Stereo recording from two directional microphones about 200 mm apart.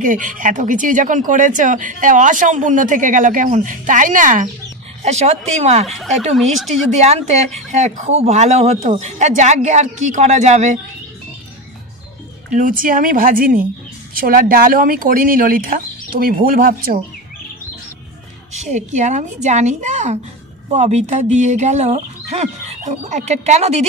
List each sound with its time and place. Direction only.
0.0 s speech: 40° right (ahead or behind)
6.3 s speech: centre (ahead or behind)
7.0 s speech: 35° right (ahead or behind)
12.5 s speech: 40° right (ahead or behind)
18.5 s speech: 35° right (ahead or behind)